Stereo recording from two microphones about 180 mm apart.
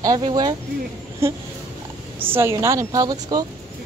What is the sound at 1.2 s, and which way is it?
A woman's voice, 15° right (ahead or behind).